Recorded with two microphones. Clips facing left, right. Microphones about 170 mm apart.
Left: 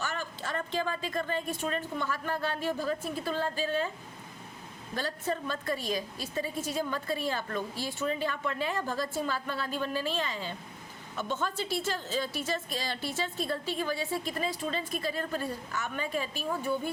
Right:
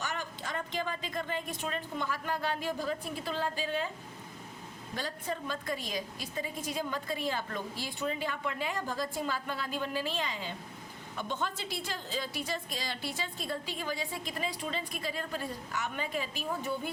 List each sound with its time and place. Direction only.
0.0 s a woman's voice: 15° right (ahead or behind)
4.9 s a woman's voice: 15° right (ahead or behind)
14.9 s a woman's voice: 45° left (ahead or behind)
15.7 s a woman's voice: 15° right (ahead or behind)